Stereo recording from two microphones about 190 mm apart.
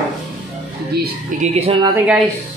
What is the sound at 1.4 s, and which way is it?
Speech, 35° right (ahead or behind).